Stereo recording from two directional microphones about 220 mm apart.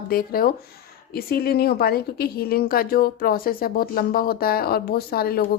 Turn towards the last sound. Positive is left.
turn(degrees=45)  # may be behind; listen again after turning